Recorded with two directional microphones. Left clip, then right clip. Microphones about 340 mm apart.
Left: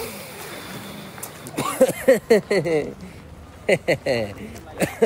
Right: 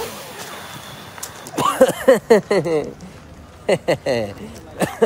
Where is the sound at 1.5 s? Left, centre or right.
Centre.